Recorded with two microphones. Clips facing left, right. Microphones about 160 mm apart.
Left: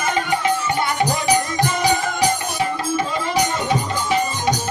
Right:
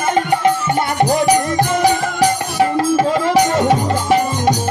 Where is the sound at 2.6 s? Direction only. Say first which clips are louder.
Right 7 dB; 80° right.